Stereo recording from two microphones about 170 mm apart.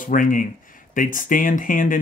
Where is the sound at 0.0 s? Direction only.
50° left (ahead or behind).